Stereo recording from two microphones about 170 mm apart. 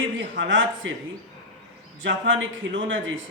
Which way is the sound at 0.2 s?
90° right.